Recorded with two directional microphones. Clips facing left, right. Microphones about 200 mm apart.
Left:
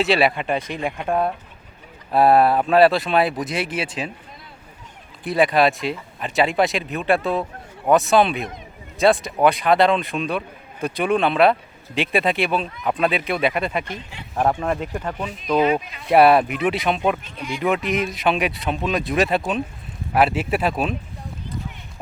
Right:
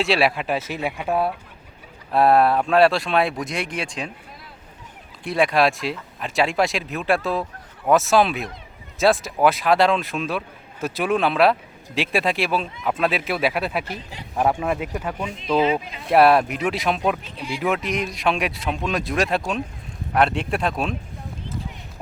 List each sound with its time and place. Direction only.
0.0 s speech: centre (ahead or behind)
5.2 s speech: centre (ahead or behind)
15.6 s speech: 25° right (ahead or behind)
16.0 s speech: centre (ahead or behind)
17.3 s speech: 30° right (ahead or behind)
17.6 s speech: centre (ahead or behind)